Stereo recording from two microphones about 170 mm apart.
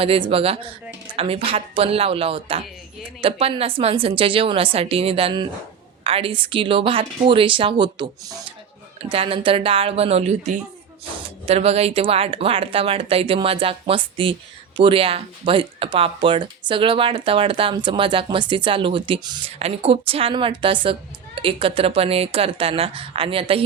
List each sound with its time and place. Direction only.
0.0 s speech: 35° right (ahead or behind)